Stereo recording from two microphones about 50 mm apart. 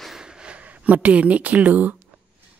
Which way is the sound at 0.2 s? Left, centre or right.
Centre.